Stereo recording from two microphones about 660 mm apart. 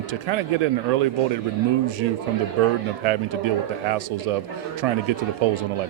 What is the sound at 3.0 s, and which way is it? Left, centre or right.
Speech, right.